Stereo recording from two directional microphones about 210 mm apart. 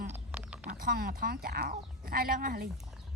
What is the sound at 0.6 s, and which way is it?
Speech, 45° right (ahead or behind).